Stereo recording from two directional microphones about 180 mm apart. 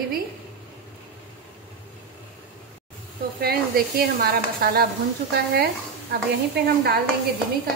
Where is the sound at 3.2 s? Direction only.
55° right (ahead or behind).